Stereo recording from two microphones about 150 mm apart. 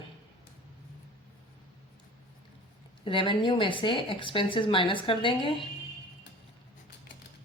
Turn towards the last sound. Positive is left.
turn(degrees=35)  # may be behind; listen again after turning